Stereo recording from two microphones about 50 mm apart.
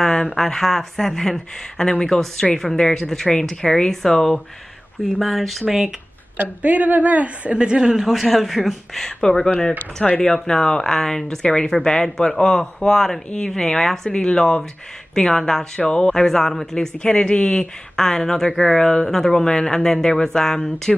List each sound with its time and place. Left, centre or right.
0.0 s speech: centre
6.6 s a man's voice: right
7.5 s speech: centre